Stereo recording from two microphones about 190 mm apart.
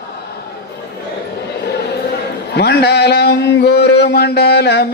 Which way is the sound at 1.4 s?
60° left (ahead or behind).